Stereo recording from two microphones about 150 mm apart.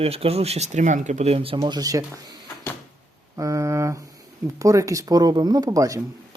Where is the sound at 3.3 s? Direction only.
20° right (ahead or behind).